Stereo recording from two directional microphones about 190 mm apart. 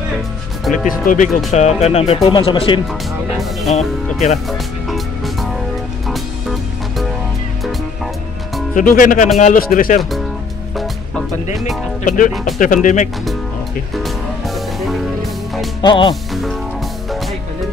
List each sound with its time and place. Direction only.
1.0 s speech: 40° left (ahead or behind)
2.9 s speech: centre (ahead or behind)
3.7 s speech: 35° left (ahead or behind)
4.5 s music: centre (ahead or behind)
8.7 s speech: 45° left (ahead or behind)
11.5 s speech: centre (ahead or behind)
12.0 s speech: 45° left (ahead or behind)
13.9 s music: centre (ahead or behind)
15.8 s speech: 25° left (ahead or behind)